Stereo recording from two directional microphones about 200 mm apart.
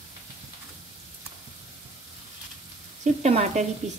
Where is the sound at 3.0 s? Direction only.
35° right (ahead or behind).